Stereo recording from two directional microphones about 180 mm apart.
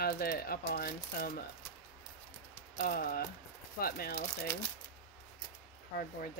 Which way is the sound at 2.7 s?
55° left (ahead or behind).